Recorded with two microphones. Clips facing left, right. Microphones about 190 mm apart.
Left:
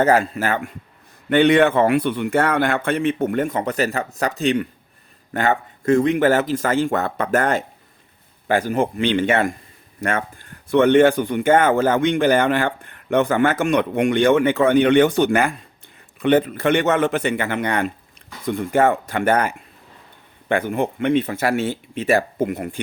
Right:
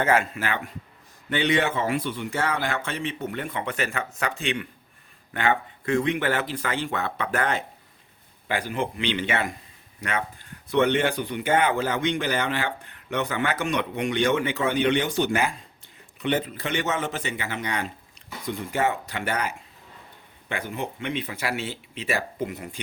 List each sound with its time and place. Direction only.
0.0 s speech: 40° left (ahead or behind)
1.3 s a man's voice: 55° left (ahead or behind)